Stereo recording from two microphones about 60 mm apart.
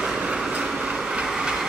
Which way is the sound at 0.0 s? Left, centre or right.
Centre.